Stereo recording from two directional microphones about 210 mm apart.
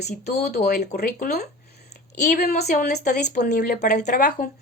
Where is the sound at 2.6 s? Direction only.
50° left (ahead or behind).